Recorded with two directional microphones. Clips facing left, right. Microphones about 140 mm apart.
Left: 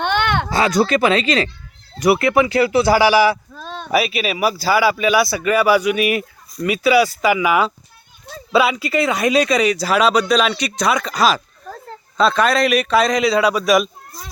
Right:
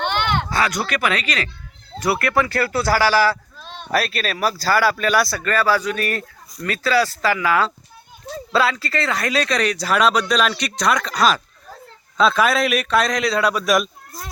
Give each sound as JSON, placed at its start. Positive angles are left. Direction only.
{"t": 0.5, "sound": "speech", "side_deg": 25}